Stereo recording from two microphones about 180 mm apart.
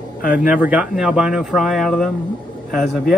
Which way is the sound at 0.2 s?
50° left (ahead or behind).